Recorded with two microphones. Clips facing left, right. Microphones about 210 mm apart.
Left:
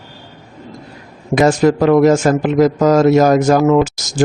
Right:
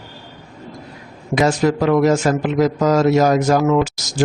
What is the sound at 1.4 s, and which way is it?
Speech, 50° left (ahead or behind).